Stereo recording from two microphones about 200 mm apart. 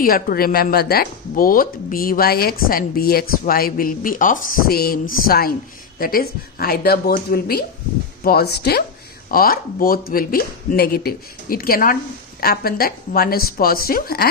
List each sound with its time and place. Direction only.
0.0 s a woman's voice: 45° left (ahead or behind)